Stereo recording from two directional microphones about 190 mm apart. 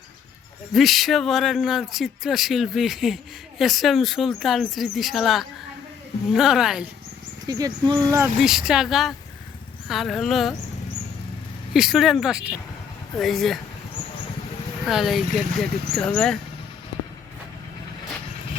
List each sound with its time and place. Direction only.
0.7 s speech: centre (ahead or behind)
7.4 s speech: 20° right (ahead or behind)
8.4 s speech: centre (ahead or behind)
11.7 s speech: centre (ahead or behind)
14.8 s speech: centre (ahead or behind)